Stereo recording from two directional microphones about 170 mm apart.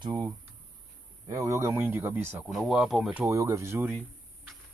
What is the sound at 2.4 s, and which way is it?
Speech, centre (ahead or behind).